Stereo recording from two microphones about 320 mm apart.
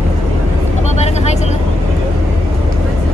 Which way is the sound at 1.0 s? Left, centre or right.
Left.